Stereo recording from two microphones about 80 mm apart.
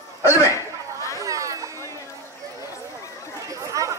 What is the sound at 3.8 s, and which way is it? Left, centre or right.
Chatter, right.